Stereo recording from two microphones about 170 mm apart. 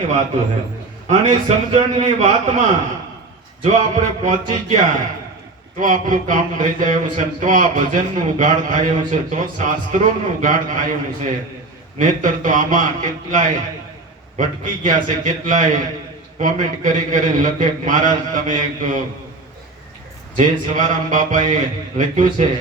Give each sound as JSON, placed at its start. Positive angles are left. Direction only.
{"t": 1.0, "sound": "a man's voice", "side_deg": -45}
{"t": 5.8, "sound": "a man's voice", "side_deg": -50}
{"t": 20.3, "sound": "a man's voice", "side_deg": -50}